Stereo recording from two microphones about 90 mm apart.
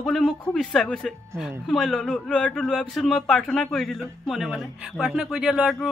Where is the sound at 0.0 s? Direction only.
5° left (ahead or behind).